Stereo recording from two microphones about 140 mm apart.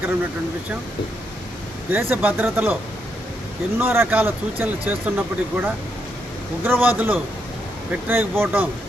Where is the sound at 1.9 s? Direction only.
15° right (ahead or behind).